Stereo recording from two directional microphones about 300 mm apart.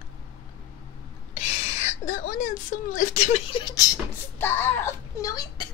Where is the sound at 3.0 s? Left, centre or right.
Left.